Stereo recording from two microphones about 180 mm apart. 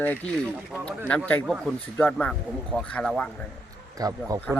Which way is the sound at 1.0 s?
5° left (ahead or behind).